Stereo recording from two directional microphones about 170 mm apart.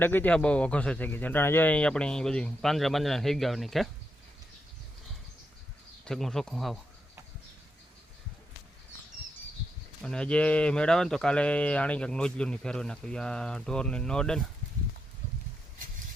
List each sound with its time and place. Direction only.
0.0 s speech: 10° left (ahead or behind)
6.1 s speech: centre (ahead or behind)
10.0 s speech: 5° left (ahead or behind)